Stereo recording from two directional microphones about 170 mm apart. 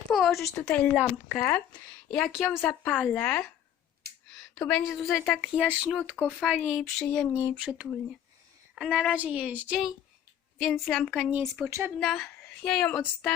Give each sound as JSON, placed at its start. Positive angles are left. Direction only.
{"t": 0.1, "sound": "a sound", "side_deg": 0}
{"t": 0.5, "sound": "speech", "side_deg": 10}
{"t": 4.0, "sound": "a sound", "side_deg": -65}
{"t": 4.7, "sound": "speech", "side_deg": 0}
{"t": 6.2, "sound": "speech", "side_deg": 10}
{"t": 6.7, "sound": "speech", "side_deg": -5}
{"t": 7.0, "sound": "speech", "side_deg": 5}
{"t": 7.5, "sound": "speech", "side_deg": -5}
{"t": 11.9, "sound": "speech", "side_deg": 0}